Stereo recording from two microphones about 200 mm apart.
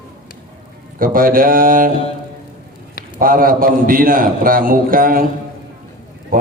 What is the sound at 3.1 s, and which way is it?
A man's voice, 45° right (ahead or behind).